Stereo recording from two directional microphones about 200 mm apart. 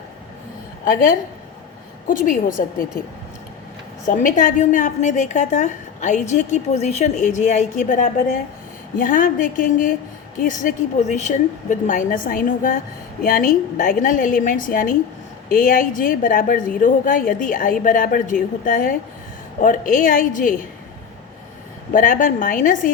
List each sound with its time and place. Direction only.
0.9 s a woman's voice: 45° left (ahead or behind)
4.2 s a woman's voice: 40° left (ahead or behind)
21.9 s a woman's voice: 45° left (ahead or behind)